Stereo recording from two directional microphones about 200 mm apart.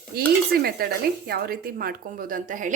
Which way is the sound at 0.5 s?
50° right (ahead or behind).